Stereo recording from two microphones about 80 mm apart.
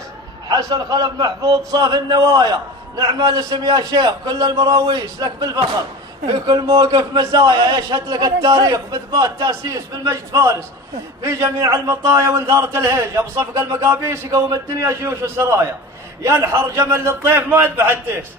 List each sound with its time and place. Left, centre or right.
0.4 s a man's voice: right